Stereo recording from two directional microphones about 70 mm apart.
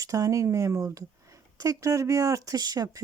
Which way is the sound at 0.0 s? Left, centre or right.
Right.